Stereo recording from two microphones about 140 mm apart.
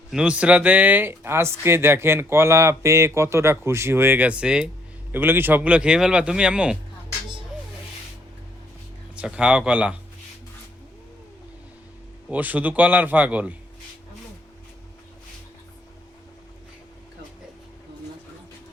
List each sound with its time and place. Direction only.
0.1 s speech: 5° right (ahead or behind)
9.1 s speech: 5° right (ahead or behind)
12.3 s speech: 10° right (ahead or behind)